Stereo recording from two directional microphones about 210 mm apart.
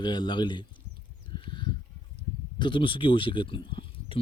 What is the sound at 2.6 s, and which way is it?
Speech, 25° left (ahead or behind).